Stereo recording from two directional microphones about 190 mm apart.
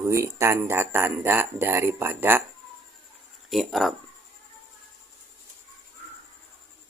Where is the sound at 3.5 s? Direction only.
Centre (ahead or behind).